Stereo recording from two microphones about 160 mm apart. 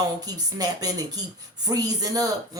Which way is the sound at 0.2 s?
25° right (ahead or behind).